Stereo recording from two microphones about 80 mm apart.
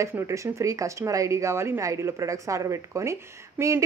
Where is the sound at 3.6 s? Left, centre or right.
Right.